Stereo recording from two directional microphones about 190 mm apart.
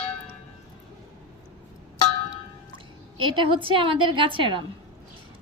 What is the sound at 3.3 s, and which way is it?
A woman's voice, 25° right (ahead or behind).